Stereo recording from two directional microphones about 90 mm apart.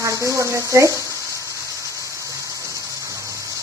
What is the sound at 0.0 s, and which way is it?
Speech, 35° right (ahead or behind).